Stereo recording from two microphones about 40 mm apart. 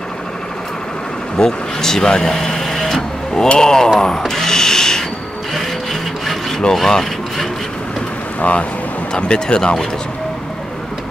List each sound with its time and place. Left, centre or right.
1.4 s speech: centre
3.4 s a sound: centre
4.3 s tools: centre
6.7 s speech: centre
8.4 s speech: left
9.1 s speech: left